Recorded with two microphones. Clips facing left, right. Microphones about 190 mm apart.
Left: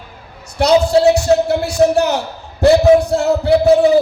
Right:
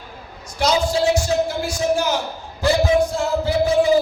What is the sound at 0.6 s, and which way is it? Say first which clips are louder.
A man's voice: left 8 dB; 65° left (ahead or behind).